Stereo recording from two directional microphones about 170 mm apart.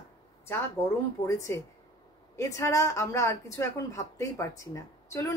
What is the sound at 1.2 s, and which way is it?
A woman's voice, 20° left (ahead or behind).